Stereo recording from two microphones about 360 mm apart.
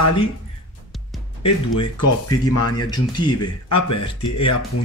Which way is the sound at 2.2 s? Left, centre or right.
Left.